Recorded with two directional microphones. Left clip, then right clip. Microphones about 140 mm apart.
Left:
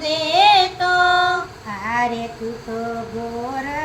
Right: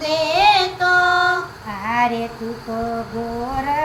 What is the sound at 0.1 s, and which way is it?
Child singing, 30° left (ahead or behind).